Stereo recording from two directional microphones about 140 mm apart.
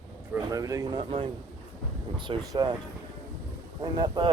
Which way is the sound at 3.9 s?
30° right (ahead or behind).